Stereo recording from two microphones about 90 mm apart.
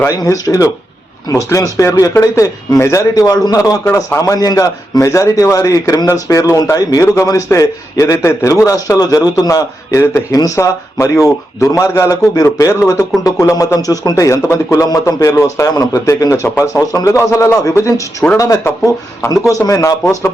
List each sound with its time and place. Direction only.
0.1 s a man's voice: 40° left (ahead or behind)
18.6 s speech: 30° left (ahead or behind)
19.3 s a man's voice: 40° left (ahead or behind)